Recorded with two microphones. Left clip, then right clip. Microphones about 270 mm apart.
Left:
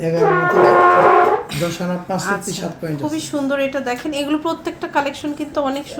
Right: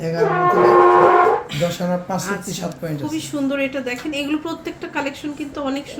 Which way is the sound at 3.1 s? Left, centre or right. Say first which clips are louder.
Left 2 dB; centre.